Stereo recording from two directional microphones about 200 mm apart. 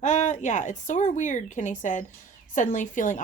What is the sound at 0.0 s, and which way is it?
Speech, 35° left (ahead or behind).